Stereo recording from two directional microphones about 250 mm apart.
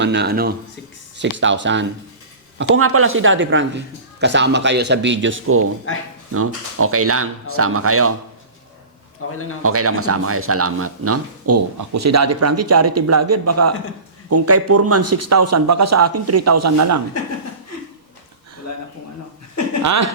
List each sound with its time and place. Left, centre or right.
0.0 s a man's voice: right
2.6 s a man's voice: right
5.9 s speech: left
6.3 s speech: right
9.6 s speech: right